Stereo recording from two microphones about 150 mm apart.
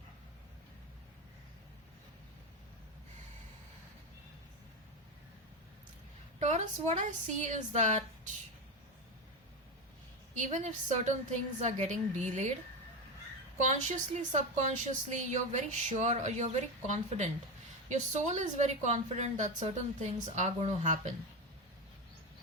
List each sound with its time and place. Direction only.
6.4 s speech: 50° right (ahead or behind)
10.3 s speech: 55° right (ahead or behind)
13.6 s speech: 55° right (ahead or behind)